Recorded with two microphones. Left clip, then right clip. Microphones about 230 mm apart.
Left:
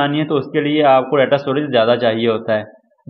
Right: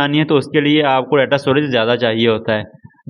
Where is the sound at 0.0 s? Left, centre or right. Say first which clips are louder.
Right 2 dB; right.